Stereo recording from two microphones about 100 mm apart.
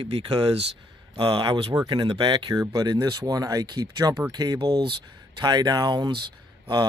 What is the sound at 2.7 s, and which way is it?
Speech, 40° right (ahead or behind).